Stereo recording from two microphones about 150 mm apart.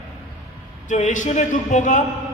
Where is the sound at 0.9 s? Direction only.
55° left (ahead or behind).